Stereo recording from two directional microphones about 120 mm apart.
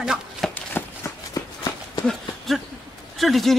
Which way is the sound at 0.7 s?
25° left (ahead or behind).